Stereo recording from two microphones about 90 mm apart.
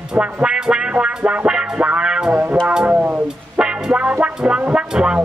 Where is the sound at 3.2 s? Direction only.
10° right (ahead or behind).